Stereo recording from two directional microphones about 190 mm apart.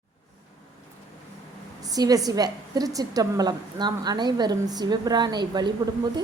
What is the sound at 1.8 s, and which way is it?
A woman's voice, 20° right (ahead or behind).